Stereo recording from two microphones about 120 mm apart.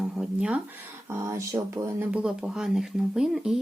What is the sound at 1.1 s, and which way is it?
Speech, 25° right (ahead or behind).